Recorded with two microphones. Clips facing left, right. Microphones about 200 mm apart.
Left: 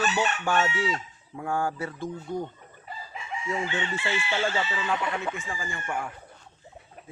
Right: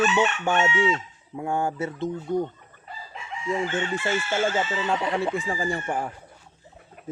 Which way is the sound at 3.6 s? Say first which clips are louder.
Right 4 dB; 50° right (ahead or behind).